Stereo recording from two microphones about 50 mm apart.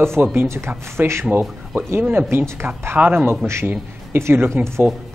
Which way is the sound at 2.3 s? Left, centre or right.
Right.